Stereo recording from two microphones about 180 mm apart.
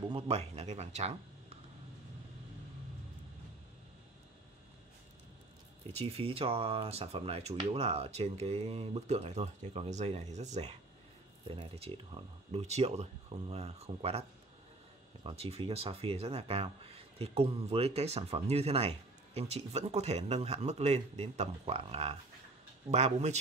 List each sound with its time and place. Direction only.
0.1 s speech: 35° right (ahead or behind)
5.9 s speech: 30° right (ahead or behind)
11.7 s speech: 35° right (ahead or behind)
15.2 s speech: 35° right (ahead or behind)